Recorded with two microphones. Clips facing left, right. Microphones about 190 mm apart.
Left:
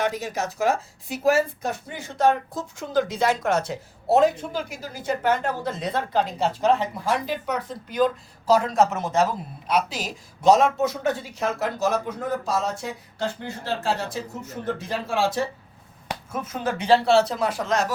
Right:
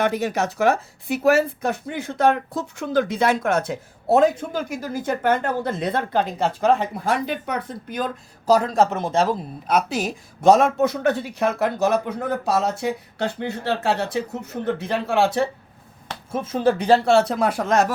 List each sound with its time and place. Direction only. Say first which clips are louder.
0.0 s speech: right 4 dB; 60° right (ahead or behind)
8.4 s speech: right 2 dB; 40° right (ahead or behind)
9.6 s speech: right 3 dB; 50° right (ahead or behind)
16.3 s speech: right 8 dB; 30° right (ahead or behind); by 17.9 s 55° right (ahead or behind)